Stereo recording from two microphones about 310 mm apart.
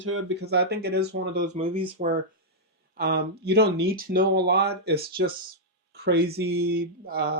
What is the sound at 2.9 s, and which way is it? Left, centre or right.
Speech, right.